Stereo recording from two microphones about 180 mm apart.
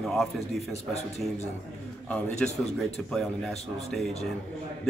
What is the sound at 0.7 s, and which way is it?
Speech, 35° left (ahead or behind).